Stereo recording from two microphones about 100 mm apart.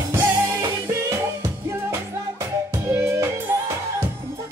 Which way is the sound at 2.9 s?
25° right (ahead or behind).